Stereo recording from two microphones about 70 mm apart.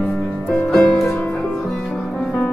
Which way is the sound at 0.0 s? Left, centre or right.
Centre.